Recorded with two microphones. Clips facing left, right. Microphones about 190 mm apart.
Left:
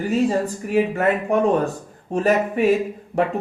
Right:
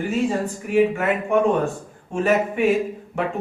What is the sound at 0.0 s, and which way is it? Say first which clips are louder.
A man's voice: left 2 dB; 40° left (ahead or behind).